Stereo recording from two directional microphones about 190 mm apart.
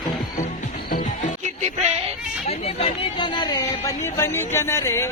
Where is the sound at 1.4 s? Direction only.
35° right (ahead or behind).